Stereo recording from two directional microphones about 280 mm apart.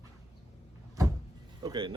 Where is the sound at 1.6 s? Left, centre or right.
Centre.